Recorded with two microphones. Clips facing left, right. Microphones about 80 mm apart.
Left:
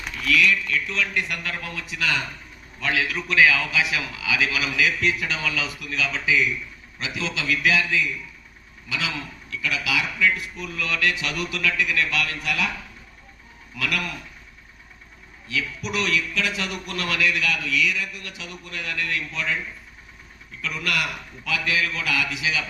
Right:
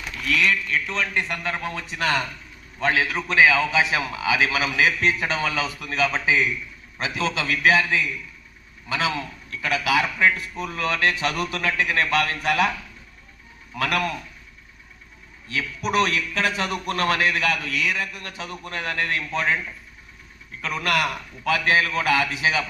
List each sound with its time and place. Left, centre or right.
0.3 s a man's voice: right
13.7 s a man's voice: right
15.4 s a man's voice: right
20.6 s a man's voice: right